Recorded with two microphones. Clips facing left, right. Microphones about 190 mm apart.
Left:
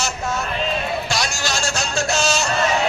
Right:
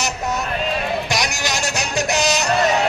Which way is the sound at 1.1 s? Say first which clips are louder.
Right 1 dB; 20° right (ahead or behind).